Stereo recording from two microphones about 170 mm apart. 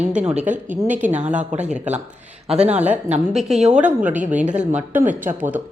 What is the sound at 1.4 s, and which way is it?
Speech, 45° right (ahead or behind).